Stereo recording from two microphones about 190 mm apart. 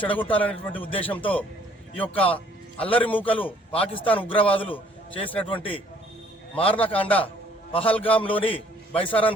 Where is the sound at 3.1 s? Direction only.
30° left (ahead or behind).